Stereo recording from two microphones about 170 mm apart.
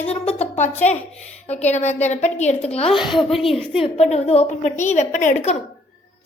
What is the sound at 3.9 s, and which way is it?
A woman's voice, 40° left (ahead or behind).